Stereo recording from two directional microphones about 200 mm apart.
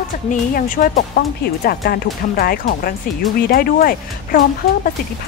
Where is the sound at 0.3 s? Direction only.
45° left (ahead or behind).